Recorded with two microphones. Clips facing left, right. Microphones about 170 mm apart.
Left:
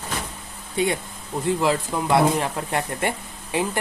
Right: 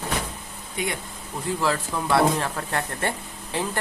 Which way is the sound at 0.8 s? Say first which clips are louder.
Left 7 dB; 30° left (ahead or behind).